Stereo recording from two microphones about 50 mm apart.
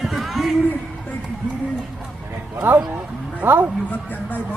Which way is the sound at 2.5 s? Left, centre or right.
Right.